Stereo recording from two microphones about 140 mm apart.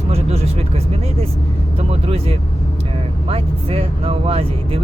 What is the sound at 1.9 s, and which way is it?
Speech, 45° right (ahead or behind).